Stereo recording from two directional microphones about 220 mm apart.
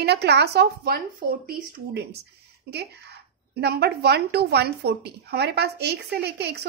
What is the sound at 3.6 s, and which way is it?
A woman's voice, 50° right (ahead or behind).